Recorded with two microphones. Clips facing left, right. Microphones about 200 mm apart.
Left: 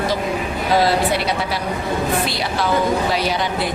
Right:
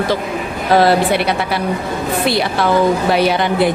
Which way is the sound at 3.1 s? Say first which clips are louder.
Right 7 dB; 60° right (ahead or behind).